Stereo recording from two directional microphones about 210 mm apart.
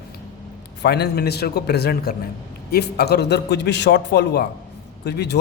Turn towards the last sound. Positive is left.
turn(degrees=50)  # may be behind; listen again after turning